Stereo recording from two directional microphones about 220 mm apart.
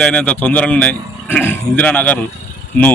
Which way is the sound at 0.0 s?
5° left (ahead or behind).